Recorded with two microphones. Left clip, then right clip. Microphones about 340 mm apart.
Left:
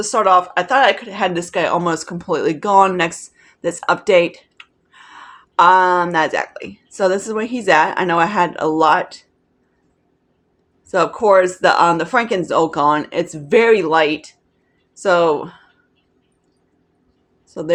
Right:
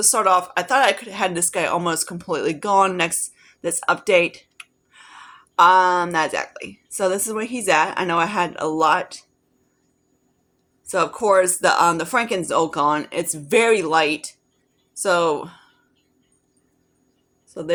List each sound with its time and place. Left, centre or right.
0.0 s speech: right
10.8 s speech: right
14.9 s a woman's voice: right